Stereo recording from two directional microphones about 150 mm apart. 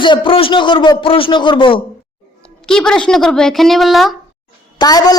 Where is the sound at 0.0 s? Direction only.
35° left (ahead or behind).